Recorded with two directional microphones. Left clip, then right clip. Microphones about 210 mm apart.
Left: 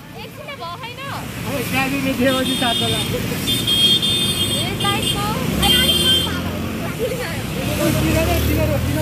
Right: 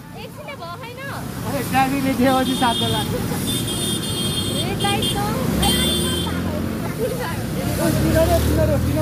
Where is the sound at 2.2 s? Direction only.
15° right (ahead or behind).